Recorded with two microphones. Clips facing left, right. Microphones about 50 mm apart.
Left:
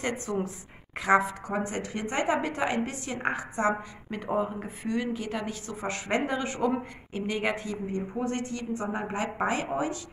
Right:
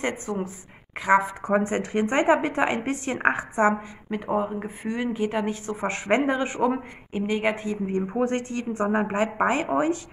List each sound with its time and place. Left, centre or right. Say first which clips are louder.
0.3 s speech: right 1 dB; centre
1.4 s a woman's voice: right 8 dB; right
4.1 s speech: right 3 dB; centre
7.7 s a woman's voice: right 6 dB; right